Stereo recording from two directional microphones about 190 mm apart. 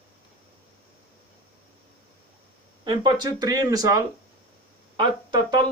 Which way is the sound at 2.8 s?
25° right (ahead or behind).